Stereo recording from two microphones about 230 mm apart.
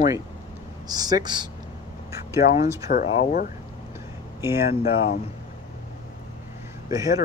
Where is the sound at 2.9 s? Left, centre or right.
Left.